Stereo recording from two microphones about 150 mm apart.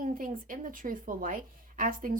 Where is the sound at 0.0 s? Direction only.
65° right (ahead or behind).